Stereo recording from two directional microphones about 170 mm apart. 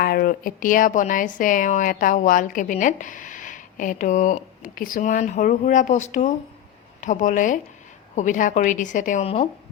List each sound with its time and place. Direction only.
0.0 s a woman's voice: 60° left (ahead or behind); by 9.5 s 35° left (ahead or behind)